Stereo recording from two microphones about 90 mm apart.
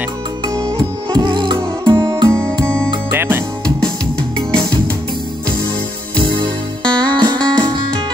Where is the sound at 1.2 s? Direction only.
60° right (ahead or behind).